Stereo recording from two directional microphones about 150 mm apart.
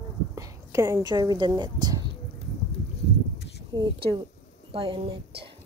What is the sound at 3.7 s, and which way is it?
A woman's voice, 30° right (ahead or behind).